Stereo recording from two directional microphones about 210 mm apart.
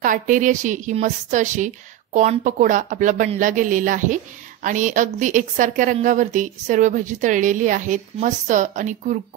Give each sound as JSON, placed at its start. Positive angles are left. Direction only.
{"t": 0.0, "sound": "a woman's voice", "side_deg": -40}